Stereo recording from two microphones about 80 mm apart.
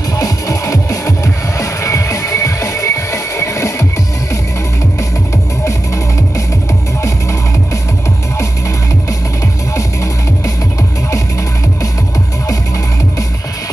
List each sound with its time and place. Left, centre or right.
0.2 s music: left
7.0 s music: left